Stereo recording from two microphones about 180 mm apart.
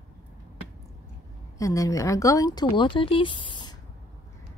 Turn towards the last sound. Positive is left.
turn(degrees=25)  # may be behind; listen again after turning